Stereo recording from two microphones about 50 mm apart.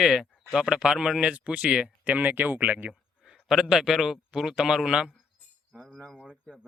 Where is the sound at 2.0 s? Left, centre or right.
Right.